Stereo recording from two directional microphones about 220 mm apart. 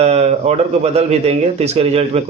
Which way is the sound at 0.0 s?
30° right (ahead or behind).